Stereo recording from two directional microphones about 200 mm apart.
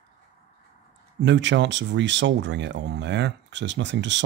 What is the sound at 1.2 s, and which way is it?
Speech, 60° right (ahead or behind).